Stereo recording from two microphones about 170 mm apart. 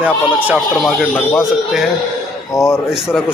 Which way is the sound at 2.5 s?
15° left (ahead or behind).